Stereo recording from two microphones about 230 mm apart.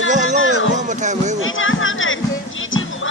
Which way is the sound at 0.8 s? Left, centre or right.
Right.